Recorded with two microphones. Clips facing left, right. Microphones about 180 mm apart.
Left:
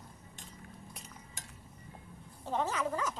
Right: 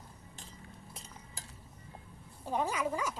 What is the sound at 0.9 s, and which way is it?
Cutlery, 30° right (ahead or behind).